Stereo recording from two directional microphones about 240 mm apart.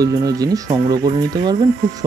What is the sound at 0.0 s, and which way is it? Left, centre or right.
Speech, centre.